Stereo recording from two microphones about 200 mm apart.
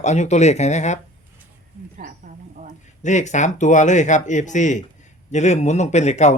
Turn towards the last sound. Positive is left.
turn(degrees=35)  # may be behind; listen again after turning